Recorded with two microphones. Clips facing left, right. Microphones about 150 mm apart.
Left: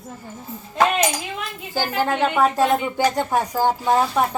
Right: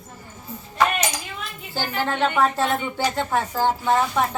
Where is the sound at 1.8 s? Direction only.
10° left (ahead or behind).